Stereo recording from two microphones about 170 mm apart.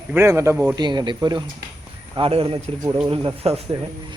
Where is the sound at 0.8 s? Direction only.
25° right (ahead or behind).